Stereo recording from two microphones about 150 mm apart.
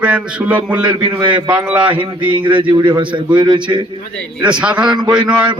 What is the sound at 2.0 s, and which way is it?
A man's voice, 35° right (ahead or behind).